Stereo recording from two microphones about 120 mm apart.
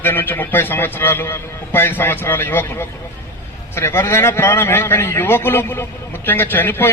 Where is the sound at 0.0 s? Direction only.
15° left (ahead or behind).